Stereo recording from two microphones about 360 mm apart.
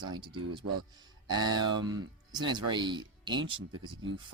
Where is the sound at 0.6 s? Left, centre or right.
Right.